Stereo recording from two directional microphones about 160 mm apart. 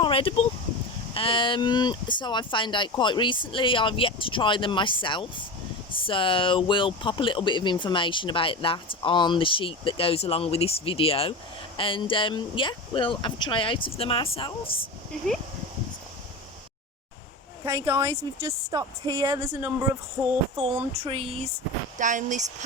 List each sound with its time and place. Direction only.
0.0 s speech: 35° left (ahead or behind)
17.8 s speech: 15° right (ahead or behind)
20.2 s music: 15° right (ahead or behind)
20.6 s speech: 40° right (ahead or behind)
21.9 s speech: 50° right (ahead or behind)